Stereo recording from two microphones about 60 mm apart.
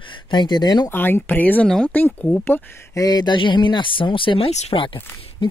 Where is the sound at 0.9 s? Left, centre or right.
Left.